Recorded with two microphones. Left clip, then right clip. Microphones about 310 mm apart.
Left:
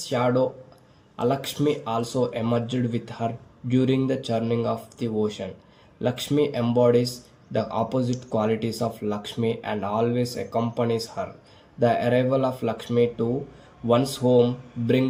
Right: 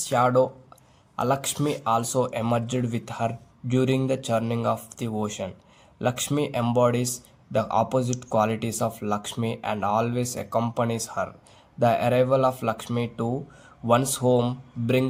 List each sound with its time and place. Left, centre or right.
0.0 s speech: right